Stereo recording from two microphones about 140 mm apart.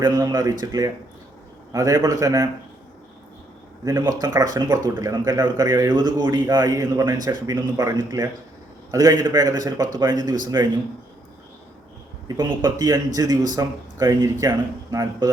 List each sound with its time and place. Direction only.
0.0 s a man's voice: 25° right (ahead or behind)
3.8 s a man's voice: 25° right (ahead or behind)
13.1 s a man's voice: 30° right (ahead or behind)